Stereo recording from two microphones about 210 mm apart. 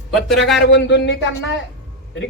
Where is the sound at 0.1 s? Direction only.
Centre (ahead or behind).